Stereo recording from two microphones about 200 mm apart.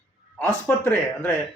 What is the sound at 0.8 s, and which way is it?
Speech, 10° left (ahead or behind).